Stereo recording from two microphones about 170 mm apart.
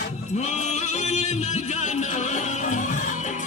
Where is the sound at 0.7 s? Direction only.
45° left (ahead or behind).